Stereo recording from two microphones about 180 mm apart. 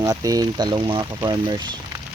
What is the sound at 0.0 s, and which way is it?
Speech, 20° right (ahead or behind).